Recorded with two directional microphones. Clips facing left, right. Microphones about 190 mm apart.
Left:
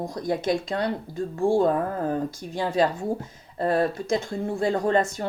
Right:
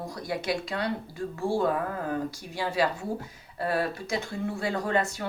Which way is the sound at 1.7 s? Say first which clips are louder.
Left 4 dB; 40° left (ahead or behind).